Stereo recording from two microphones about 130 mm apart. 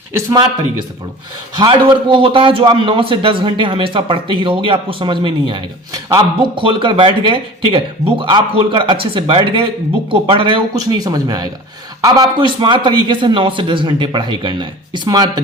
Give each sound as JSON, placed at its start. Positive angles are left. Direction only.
{"t": 1.5, "sound": "a man's voice", "side_deg": -40}